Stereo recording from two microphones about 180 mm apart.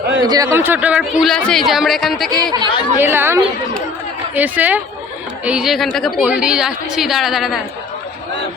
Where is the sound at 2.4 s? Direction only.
20° right (ahead or behind); by 7.6 s centre (ahead or behind).